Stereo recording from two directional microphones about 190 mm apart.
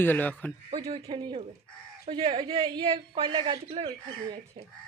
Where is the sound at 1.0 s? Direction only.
25° right (ahead or behind).